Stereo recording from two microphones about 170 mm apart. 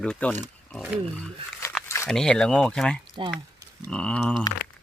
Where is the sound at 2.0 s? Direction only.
5° left (ahead or behind).